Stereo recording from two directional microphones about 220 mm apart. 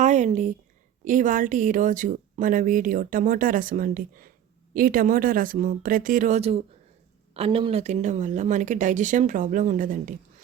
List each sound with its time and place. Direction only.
0.0 s a woman's voice: 35° right (ahead or behind)